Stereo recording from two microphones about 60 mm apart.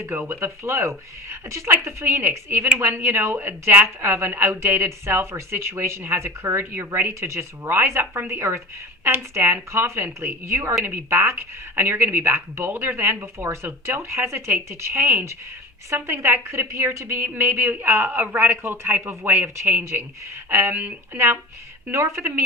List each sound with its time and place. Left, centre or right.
0.0 s a woman's voice: right
3.8 s a woman's voice: right
7.1 s a woman's voice: right
21.9 s a woman's voice: right